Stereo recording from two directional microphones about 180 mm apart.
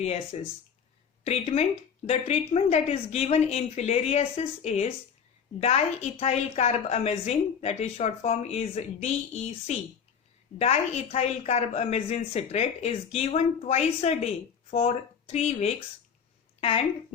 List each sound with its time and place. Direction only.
0.0 s a woman's voice: 35° left (ahead or behind)